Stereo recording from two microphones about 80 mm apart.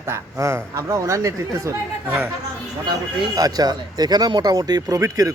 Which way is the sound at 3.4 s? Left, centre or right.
Right.